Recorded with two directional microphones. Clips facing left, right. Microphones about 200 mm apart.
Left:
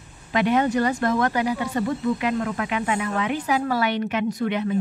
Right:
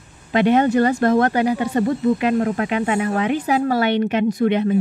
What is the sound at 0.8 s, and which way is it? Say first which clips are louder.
Speech: right 6 dB; 50° right (ahead or behind).